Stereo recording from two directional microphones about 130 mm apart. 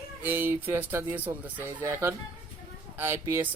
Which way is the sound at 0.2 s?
15° right (ahead or behind).